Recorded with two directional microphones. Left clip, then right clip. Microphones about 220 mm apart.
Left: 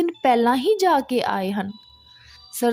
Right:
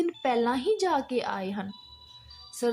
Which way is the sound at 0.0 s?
40° left (ahead or behind).